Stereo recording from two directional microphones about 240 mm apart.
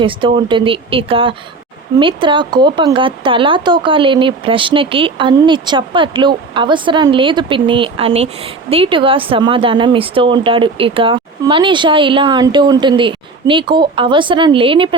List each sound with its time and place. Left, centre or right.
0.0 s speech: right